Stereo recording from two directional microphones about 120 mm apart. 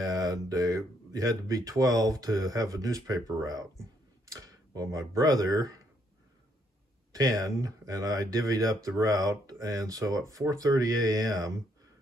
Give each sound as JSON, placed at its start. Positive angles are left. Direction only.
{"t": 0.0, "sound": "speech", "side_deg": -30}
{"t": 7.1, "sound": "speech", "side_deg": -30}